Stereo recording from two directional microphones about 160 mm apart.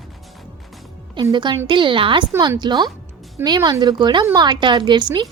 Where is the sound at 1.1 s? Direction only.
30° right (ahead or behind).